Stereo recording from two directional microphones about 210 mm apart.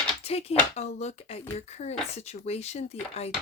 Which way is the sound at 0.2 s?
30° left (ahead or behind).